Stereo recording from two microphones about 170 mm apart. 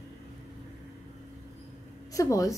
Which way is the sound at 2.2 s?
20° left (ahead or behind).